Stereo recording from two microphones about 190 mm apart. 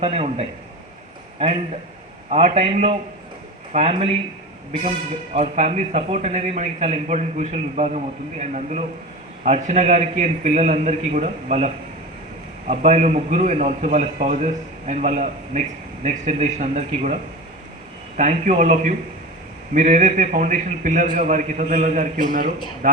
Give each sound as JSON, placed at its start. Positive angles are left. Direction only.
{"t": 0.0, "sound": "a man's voice", "side_deg": -30}
{"t": 2.3, "sound": "a man's voice", "side_deg": -35}
{"t": 5.3, "sound": "a man's voice", "side_deg": -40}
{"t": 18.2, "sound": "a man's voice", "side_deg": -40}